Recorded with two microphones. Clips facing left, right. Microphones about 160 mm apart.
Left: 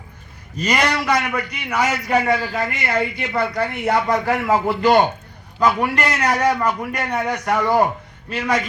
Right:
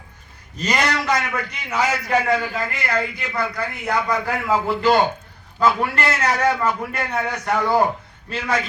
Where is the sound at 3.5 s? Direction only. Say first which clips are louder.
Left 4 dB; 25° left (ahead or behind).